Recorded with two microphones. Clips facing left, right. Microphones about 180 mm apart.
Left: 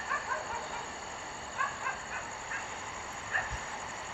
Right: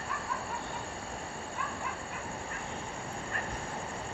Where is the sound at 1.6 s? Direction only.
75° left (ahead or behind).